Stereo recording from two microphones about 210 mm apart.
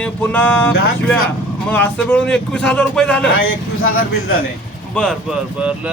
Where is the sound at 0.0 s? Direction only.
5° left (ahead or behind).